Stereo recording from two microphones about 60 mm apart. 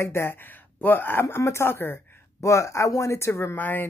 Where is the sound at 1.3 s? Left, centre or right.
Left.